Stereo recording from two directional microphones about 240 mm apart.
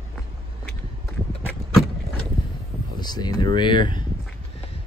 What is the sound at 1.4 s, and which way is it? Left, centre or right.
Vehicle, centre.